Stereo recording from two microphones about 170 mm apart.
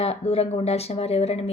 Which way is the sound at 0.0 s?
35° left (ahead or behind).